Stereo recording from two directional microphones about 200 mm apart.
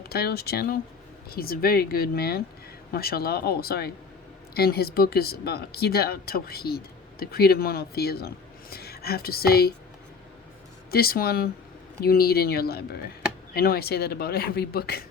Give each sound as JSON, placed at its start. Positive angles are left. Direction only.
{"t": 0.1, "sound": "speech", "side_deg": 50}
{"t": 10.9, "sound": "speech", "side_deg": 50}